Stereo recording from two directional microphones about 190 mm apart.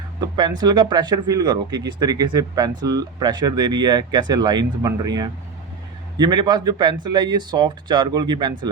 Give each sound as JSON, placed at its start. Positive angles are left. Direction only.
{"t": 0.2, "sound": "speech", "side_deg": -20}